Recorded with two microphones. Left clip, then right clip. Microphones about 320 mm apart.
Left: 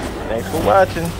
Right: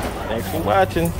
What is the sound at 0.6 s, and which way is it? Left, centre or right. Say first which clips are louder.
Speech: left 4 dB; centre.